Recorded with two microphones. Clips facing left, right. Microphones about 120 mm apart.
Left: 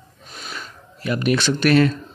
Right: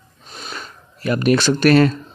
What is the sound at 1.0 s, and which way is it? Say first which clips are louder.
Speech: right 4 dB; 45° right (ahead or behind).